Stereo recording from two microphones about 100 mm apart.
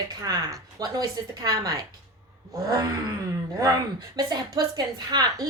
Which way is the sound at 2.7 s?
45° right (ahead or behind).